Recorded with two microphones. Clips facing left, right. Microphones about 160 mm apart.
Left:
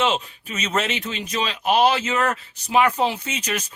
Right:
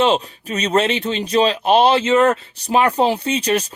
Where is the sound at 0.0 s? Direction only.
35° right (ahead or behind).